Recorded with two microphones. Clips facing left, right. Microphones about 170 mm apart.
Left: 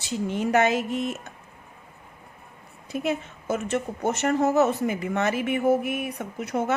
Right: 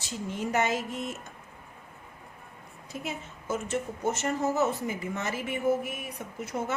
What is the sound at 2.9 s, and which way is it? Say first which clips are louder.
Speech: left 10 dB; 65° left (ahead or behind).